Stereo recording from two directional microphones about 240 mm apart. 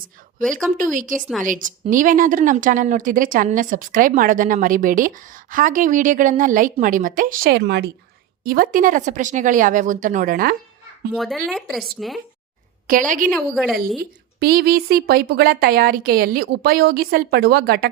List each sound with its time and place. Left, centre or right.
0.8 s speech: right
11.1 s speech: centre
12.9 s speech: right
13.3 s speech: centre
14.3 s speech: right